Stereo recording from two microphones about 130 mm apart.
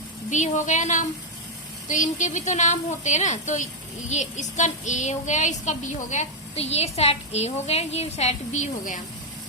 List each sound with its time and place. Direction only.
0.3 s a woman's voice: 70° left (ahead or behind)